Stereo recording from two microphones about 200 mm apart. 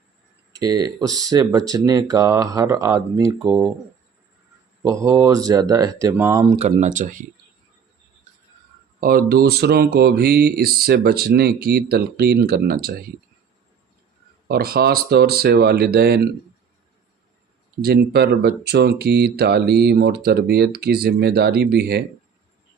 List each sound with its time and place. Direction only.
0.6 s speech: 20° right (ahead or behind)
0.9 s speech: centre (ahead or behind)
1.3 s speech: 20° right (ahead or behind)
4.8 s speech: 15° right (ahead or behind)
6.6 s speech: 35° right (ahead or behind)
9.0 s speech: 45° right (ahead or behind)
14.4 s speech: 50° right (ahead or behind)
17.8 s speech: 55° right (ahead or behind)